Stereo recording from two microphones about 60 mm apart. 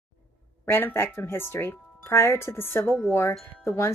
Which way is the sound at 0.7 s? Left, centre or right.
Left.